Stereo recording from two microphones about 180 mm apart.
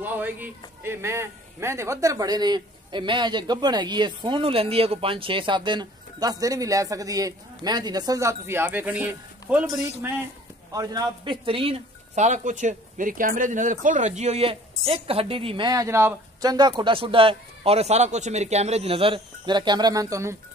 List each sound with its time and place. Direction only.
0.0 s a man's voice: 10° right (ahead or behind)
10.7 s speech: 20° right (ahead or behind)